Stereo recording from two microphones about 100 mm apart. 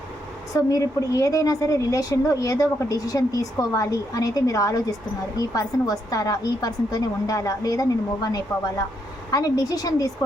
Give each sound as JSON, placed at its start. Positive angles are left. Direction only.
{"t": 0.5, "sound": "a woman's voice", "side_deg": 35}